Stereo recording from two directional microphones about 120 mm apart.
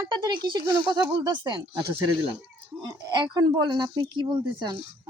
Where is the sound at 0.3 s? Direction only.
35° right (ahead or behind).